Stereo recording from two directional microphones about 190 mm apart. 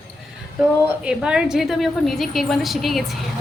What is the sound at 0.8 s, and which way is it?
A woman's voice, 5° right (ahead or behind).